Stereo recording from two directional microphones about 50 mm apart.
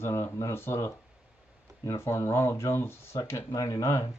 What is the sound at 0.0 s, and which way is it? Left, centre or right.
Speech, left.